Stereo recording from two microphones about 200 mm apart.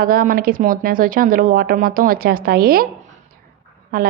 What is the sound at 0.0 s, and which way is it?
A woman's voice, 45° right (ahead or behind).